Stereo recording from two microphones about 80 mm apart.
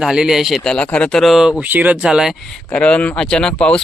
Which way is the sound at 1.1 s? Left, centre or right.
Centre.